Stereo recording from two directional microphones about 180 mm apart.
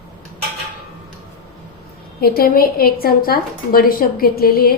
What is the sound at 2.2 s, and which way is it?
A woman's voice, 55° left (ahead or behind).